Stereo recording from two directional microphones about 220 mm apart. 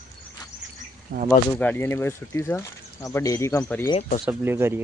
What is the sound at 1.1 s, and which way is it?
Speech, 40° right (ahead or behind).